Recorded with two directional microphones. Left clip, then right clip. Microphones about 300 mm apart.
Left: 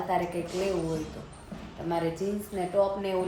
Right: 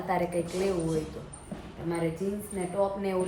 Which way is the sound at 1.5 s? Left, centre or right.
Right.